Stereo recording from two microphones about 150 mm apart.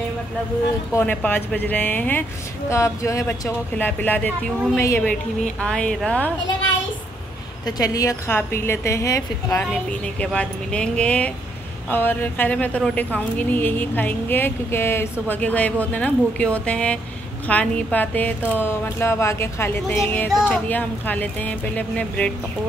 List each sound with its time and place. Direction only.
0.9 s a woman's voice: 10° left (ahead or behind)
7.6 s a woman's voice: 25° left (ahead or behind)
9.6 s a woman's voice: 5° left (ahead or behind)